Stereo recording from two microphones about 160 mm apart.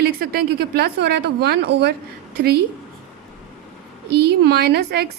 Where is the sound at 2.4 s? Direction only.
80° right.